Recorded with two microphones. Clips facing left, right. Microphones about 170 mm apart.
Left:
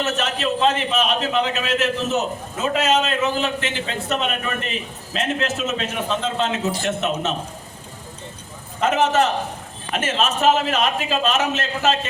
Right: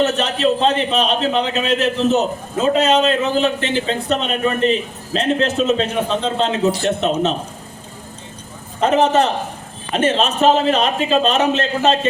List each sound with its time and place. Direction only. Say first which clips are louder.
0.0 s a man's voice: right 6 dB; 35° right (ahead or behind)
8.8 s a man's voice: right 4 dB; 35° right (ahead or behind)